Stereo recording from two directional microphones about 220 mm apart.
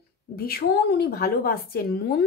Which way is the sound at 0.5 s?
45° left (ahead or behind).